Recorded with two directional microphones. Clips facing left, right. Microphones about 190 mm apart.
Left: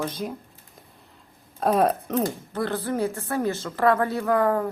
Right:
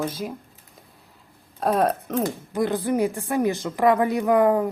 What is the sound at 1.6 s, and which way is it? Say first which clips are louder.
Speech: even; centre (ahead or behind).